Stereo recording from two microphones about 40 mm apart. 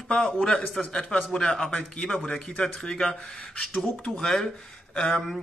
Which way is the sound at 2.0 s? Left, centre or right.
Centre.